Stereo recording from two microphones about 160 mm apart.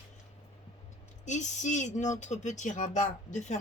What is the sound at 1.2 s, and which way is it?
Speech, 50° left (ahead or behind).